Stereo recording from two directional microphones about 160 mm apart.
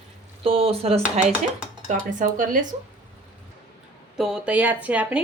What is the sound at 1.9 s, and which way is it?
Speech, 50° right (ahead or behind).